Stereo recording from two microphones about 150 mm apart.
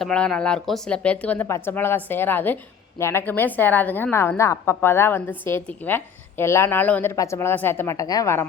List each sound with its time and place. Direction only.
0.0 s a woman's voice: 5° left (ahead or behind)